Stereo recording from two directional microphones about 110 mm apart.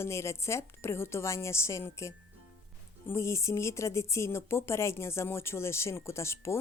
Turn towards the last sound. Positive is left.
turn(degrees=25)  # may be behind; listen again after turning